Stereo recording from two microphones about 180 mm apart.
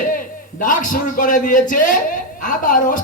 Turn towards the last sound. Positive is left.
turn(degrees=50)  # may be behind; listen again after turning